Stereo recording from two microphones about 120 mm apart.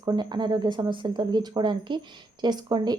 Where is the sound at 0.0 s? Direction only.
35° right (ahead or behind).